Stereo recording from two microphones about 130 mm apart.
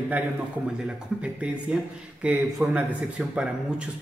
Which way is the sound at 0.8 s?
10° right (ahead or behind).